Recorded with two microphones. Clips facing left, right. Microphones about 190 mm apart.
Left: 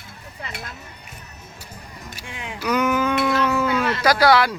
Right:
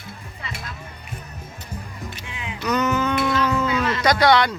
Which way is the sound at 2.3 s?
50° left (ahead or behind).